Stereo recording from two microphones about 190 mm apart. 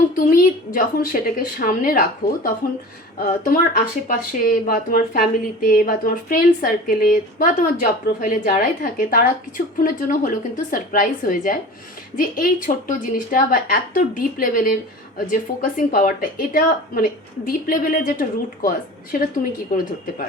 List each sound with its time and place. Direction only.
0.2 s speech: 45° left (ahead or behind)